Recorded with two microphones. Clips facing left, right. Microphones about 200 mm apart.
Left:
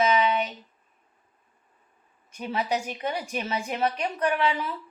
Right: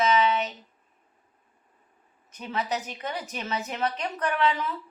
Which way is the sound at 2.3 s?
10° left (ahead or behind).